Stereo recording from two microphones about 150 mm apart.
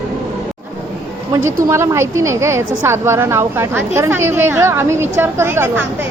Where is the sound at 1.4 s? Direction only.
15° right (ahead or behind).